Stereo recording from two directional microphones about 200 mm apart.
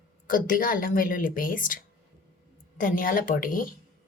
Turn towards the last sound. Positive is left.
turn(degrees=45)  # may be behind; listen again after turning